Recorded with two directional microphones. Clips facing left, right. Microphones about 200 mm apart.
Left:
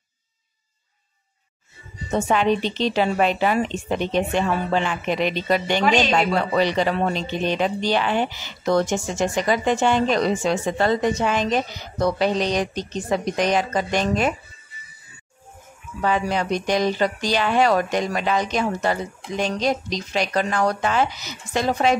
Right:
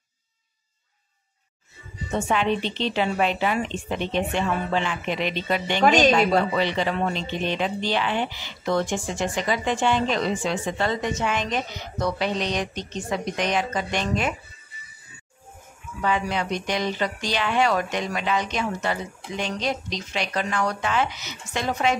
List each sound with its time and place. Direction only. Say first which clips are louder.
2.1 s speech: left 4 dB; 40° left (ahead or behind)
16.0 s speech: left 3 dB; 40° left (ahead or behind)